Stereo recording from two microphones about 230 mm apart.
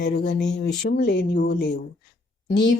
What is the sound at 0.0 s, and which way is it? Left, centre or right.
Speech, left.